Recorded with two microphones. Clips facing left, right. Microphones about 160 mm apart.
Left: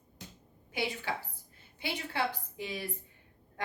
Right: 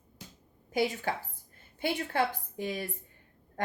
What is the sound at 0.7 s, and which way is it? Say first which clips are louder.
Speech: right 5 dB; 45° right (ahead or behind).